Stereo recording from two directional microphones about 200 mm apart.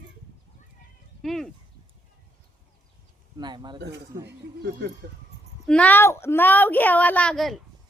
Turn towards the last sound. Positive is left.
turn(degrees=0)  # may be behind; listen again after turning